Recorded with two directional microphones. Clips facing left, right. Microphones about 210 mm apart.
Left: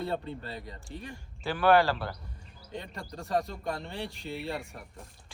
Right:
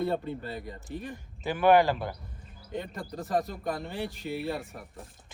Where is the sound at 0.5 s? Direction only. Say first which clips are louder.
Right 3 dB; 50° right (ahead or behind).